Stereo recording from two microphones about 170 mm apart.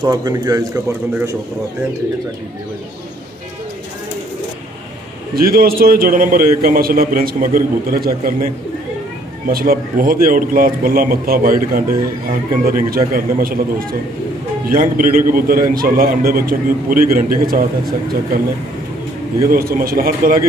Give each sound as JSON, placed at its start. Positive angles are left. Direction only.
{"t": 0.0, "sound": "a man's voice", "side_deg": -20}
{"t": 5.3, "sound": "a man's voice", "side_deg": -60}
{"t": 9.5, "sound": "a man's voice", "side_deg": -60}
{"t": 19.5, "sound": "a man's voice", "side_deg": -60}